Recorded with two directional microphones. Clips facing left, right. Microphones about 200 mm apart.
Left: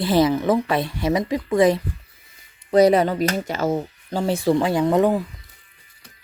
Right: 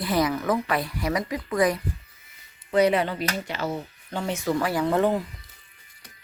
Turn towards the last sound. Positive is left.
turn(degrees=15)  # may be behind; listen again after turning